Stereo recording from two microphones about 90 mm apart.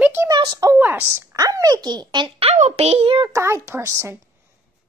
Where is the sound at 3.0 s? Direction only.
90° right.